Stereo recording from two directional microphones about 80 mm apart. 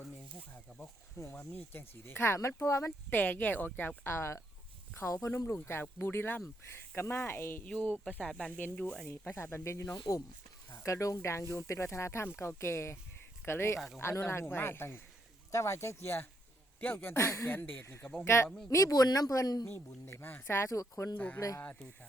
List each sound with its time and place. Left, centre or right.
0.7 s speech: centre; by 2.9 s left
3.1 s speech: left
7.6 s speech: centre
9.0 s speech: left
10.0 s speech: left
13.7 s speech: centre
14.0 s speech: left
17.5 s speech: left
18.7 s speech: left
19.6 s speech: left
21.6 s speech: centre